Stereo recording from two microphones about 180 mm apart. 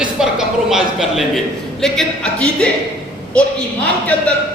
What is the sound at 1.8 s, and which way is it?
Speech, 5° left (ahead or behind).